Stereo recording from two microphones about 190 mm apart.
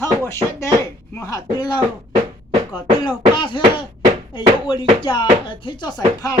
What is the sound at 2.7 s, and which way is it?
Speech, 25° left (ahead or behind).